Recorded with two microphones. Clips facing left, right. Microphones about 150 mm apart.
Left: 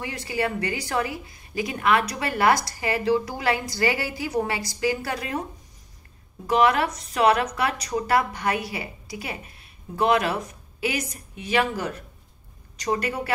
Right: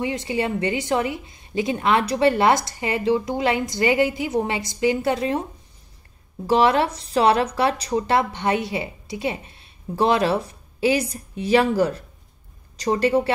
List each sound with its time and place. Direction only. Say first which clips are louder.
0.0 s speech: right 4 dB; 25° right (ahead or behind)
6.4 s speech: right 3 dB; 30° right (ahead or behind)